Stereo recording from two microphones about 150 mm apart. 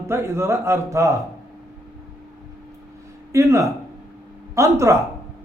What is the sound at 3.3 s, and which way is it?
A man's voice, 20° right (ahead or behind).